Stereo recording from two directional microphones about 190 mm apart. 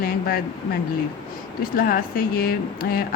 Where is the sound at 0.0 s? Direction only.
50° left (ahead or behind).